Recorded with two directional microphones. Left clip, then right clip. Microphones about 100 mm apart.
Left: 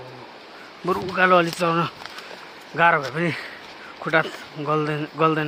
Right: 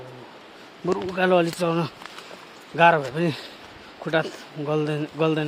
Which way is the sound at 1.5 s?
25° right (ahead or behind).